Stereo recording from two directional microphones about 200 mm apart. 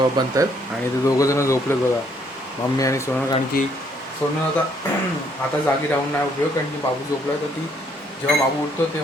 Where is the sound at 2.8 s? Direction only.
15° left (ahead or behind).